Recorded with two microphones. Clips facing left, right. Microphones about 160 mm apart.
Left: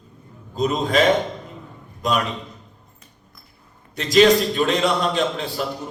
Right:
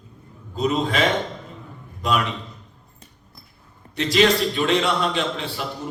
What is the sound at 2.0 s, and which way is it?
Speech, 40° left (ahead or behind).